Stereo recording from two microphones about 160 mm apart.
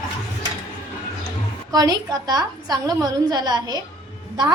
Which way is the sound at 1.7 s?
25° right (ahead or behind).